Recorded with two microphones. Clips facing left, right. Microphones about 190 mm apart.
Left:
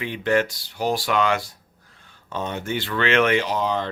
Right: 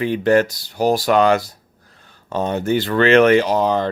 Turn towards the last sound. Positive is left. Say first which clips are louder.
# right 6 dB
turn(degrees=-45)  # may be behind; listen again after turning